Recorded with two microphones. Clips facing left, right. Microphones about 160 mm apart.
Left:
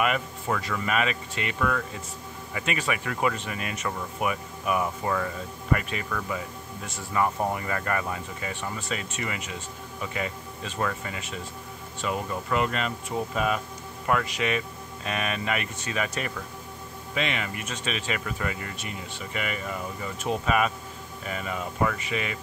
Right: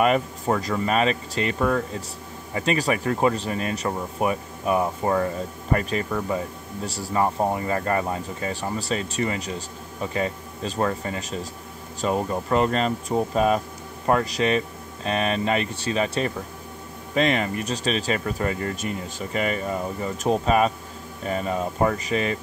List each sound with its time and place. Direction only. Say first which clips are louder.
0.0 s speech: right 6 dB; 35° right (ahead or behind)